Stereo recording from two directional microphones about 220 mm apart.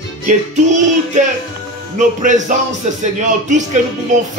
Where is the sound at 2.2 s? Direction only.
35° right (ahead or behind).